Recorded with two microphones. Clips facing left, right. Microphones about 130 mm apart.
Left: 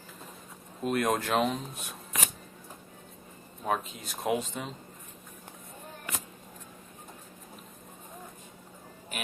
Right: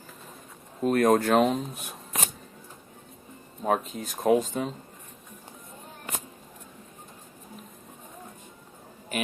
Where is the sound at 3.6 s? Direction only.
40° right (ahead or behind).